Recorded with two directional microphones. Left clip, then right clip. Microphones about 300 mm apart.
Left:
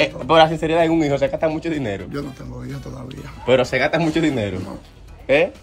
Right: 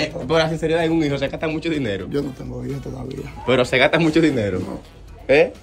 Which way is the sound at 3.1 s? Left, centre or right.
Centre.